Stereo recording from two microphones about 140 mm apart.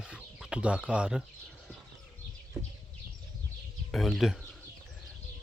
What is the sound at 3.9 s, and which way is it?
Speech, centre (ahead or behind).